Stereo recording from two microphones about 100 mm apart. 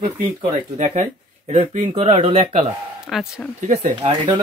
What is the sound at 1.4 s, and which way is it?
Speech, 90° right.